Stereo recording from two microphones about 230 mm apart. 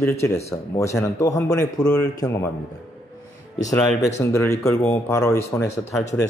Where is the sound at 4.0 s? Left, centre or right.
Centre.